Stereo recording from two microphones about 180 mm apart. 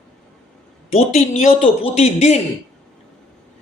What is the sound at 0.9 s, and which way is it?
Speech, 35° left (ahead or behind).